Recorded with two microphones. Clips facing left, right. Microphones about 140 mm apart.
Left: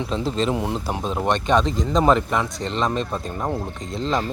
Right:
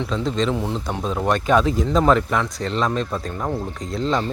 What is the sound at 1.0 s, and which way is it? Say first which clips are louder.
Speech: right 2 dB; centre (ahead or behind).